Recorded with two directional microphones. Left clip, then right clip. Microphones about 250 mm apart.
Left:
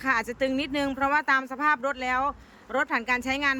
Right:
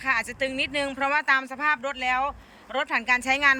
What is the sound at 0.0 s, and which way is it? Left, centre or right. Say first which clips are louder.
Speech: even; centre.